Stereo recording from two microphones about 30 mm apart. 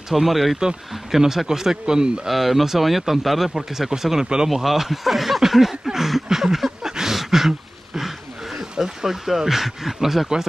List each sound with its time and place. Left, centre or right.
0.1 s speech: centre
1.5 s a man's voice: centre
2.2 s speech: centre
3.9 s speech: centre
6.2 s a sound: centre
8.5 s speech: centre